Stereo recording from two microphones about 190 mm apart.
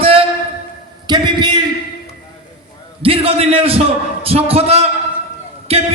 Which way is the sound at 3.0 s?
30° right (ahead or behind).